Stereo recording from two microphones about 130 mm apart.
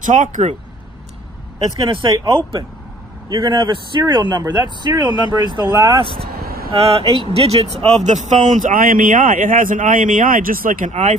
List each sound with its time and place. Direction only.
0.0 s speech: 80° right
1.9 s speech: 35° right (ahead or behind)
6.7 s speech: 45° right (ahead or behind); by 11.1 s 70° right (ahead or behind)